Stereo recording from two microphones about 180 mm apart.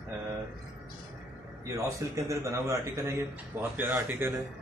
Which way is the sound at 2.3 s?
20° right (ahead or behind).